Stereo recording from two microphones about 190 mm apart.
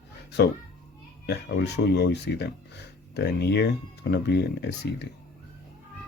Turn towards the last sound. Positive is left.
turn(degrees=60)  # may be behind; listen again after turning